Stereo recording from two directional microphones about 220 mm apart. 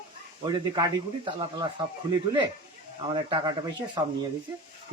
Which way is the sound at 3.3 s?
20° right (ahead or behind).